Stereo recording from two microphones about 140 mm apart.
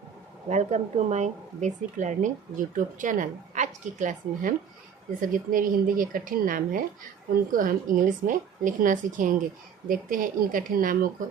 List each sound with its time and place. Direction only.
0.4 s speech: 55° right (ahead or behind)
5.2 s a woman's voice: 80° right